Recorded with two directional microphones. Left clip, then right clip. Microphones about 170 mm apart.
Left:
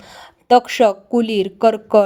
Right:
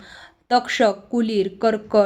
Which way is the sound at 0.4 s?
35° left (ahead or behind).